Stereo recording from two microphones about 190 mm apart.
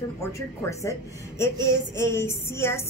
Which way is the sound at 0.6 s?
15° left (ahead or behind).